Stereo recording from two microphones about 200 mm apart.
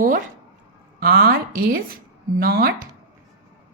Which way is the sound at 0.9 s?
55° right (ahead or behind).